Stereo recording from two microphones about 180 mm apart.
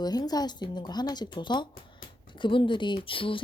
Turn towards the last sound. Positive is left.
turn(degrees=30)  # may be behind; listen again after turning